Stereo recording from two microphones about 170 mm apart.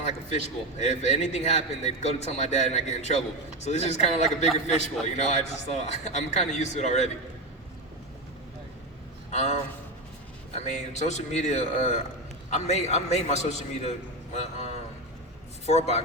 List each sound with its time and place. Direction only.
0.8 s a man's voice: 40° left (ahead or behind)
9.3 s a man's voice: 40° left (ahead or behind)